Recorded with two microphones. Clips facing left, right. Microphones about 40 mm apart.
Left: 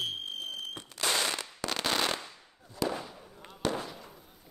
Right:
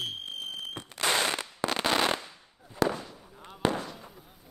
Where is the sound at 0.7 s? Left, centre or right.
Right.